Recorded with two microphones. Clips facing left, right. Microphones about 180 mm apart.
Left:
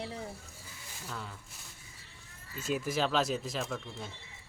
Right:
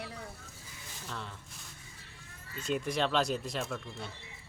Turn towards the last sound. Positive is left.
turn(degrees=0)  # may be behind; listen again after turning